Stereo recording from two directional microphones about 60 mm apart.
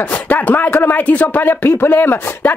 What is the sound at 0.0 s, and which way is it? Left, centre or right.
Speech, left.